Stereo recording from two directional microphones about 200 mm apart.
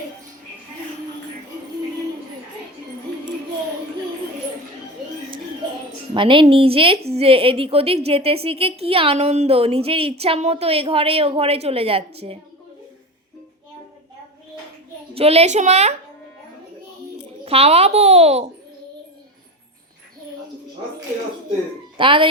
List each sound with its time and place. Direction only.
6.1 s a woman's voice: 25° right (ahead or behind)
15.1 s a child's voice: 30° right (ahead or behind)
17.4 s a child's voice: 30° right (ahead or behind)
21.9 s a woman's voice: 25° right (ahead or behind)